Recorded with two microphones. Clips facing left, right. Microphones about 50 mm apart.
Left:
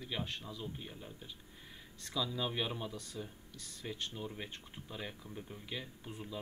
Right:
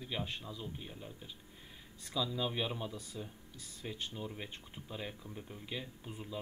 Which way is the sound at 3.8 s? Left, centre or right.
Centre.